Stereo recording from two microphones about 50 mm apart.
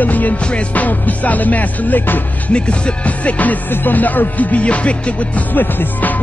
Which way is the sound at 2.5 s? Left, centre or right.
Left.